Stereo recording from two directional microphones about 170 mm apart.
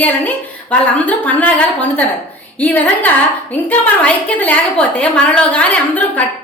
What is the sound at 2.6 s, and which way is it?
A woman's voice, 10° left (ahead or behind).